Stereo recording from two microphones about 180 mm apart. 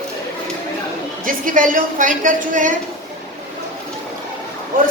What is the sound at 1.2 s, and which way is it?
A woman's voice, 50° right (ahead or behind).